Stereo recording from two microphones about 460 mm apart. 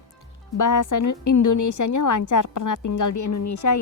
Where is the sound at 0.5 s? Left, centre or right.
Left.